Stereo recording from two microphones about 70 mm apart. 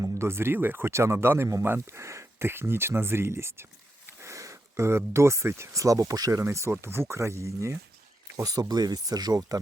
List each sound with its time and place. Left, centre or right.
0.0 s speech: right
6.5 s speech: right
8.4 s speech: right